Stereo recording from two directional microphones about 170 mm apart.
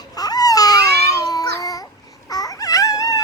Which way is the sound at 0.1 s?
20° left (ahead or behind).